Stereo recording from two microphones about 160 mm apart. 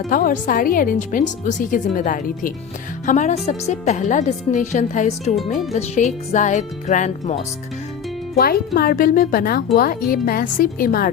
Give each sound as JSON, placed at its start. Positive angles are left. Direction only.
{"t": 0.1, "sound": "a woman's voice", "side_deg": 60}
{"t": 8.4, "sound": "speech", "side_deg": 70}